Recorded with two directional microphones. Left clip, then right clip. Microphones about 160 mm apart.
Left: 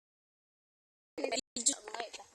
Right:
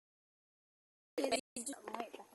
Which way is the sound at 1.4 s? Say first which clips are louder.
Left 8 dB; 60° left (ahead or behind).